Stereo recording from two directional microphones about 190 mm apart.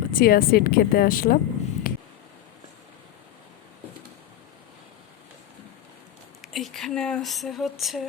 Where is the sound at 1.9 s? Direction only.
50° left (ahead or behind).